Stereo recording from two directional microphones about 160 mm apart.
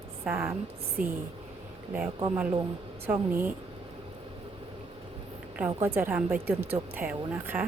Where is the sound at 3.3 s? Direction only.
10° right (ahead or behind).